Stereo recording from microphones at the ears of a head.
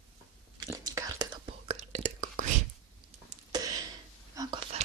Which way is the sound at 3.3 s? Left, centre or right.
Right.